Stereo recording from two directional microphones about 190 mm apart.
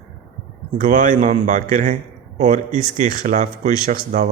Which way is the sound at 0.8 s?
40° right (ahead or behind).